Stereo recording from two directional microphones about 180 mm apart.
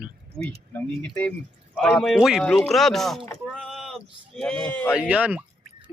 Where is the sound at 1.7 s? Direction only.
5° left (ahead or behind).